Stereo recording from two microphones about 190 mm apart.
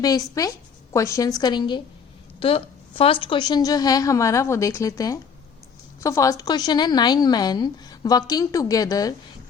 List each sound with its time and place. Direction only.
0.0 s a woman's voice: 20° left (ahead or behind)